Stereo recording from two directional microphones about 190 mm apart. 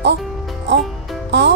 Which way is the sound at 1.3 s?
65° right (ahead or behind).